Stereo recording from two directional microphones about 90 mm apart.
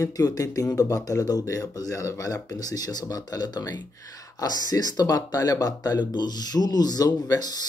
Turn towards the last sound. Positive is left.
turn(degrees=45)  # may be behind; listen again after turning